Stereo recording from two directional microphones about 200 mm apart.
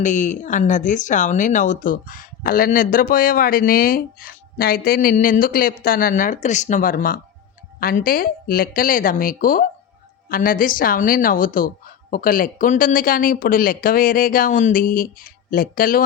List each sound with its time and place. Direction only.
0.0 s speech: 40° left (ahead or behind)